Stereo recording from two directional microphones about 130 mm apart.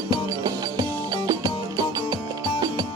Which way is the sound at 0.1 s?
30° right (ahead or behind).